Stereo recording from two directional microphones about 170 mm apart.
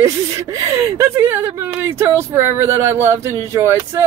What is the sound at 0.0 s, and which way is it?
Speech, 15° right (ahead or behind).